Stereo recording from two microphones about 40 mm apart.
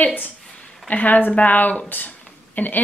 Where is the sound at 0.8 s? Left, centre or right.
Left.